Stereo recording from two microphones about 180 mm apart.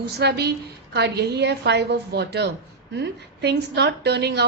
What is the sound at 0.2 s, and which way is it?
A woman's voice, 65° right (ahead or behind).